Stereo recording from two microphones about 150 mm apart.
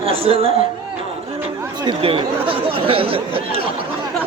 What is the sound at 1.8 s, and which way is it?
Speech, 35° right (ahead or behind).